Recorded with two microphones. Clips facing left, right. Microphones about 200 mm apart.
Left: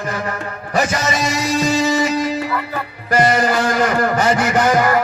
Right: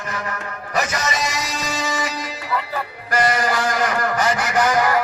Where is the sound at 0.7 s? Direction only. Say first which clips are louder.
Left 5 dB; 30° left (ahead or behind).